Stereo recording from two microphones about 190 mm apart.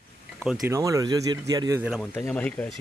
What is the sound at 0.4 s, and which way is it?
Speech, 5° right (ahead or behind).